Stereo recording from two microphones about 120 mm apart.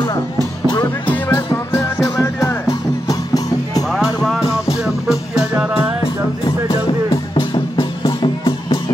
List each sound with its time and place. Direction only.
0.7 s music: 40° left (ahead or behind)
1.1 s music: 20° left (ahead or behind)
4.8 s music: 5° right (ahead or behind)
8.0 s music: 40° left (ahead or behind)